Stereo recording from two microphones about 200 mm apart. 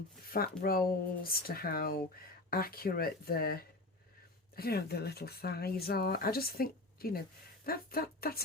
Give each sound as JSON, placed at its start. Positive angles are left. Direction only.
{"t": 0.3, "sound": "speech", "side_deg": 50}